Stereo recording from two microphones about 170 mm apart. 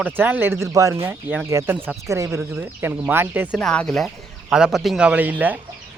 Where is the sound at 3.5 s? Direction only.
5° left (ahead or behind); by 5.5 s 10° right (ahead or behind).